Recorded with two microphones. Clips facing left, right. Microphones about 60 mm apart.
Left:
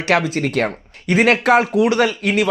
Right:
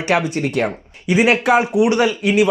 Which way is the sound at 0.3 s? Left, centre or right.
Left.